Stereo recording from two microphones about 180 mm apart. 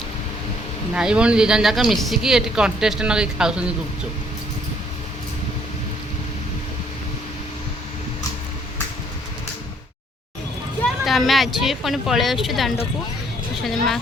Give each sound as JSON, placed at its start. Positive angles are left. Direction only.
{"t": 0.9, "sound": "speech", "side_deg": -5}
{"t": 10.8, "sound": "speech", "side_deg": 0}